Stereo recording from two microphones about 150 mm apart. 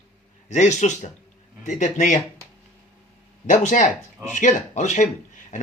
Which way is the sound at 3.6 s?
50° left (ahead or behind).